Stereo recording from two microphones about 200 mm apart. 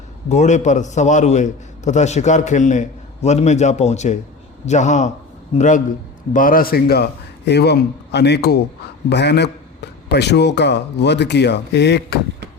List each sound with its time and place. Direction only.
0.3 s a man's voice: 35° left (ahead or behind); by 12.2 s 55° left (ahead or behind)